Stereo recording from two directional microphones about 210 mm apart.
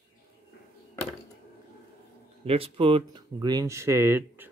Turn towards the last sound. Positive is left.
turn(degrees=-10)  # may be behind; listen again after turning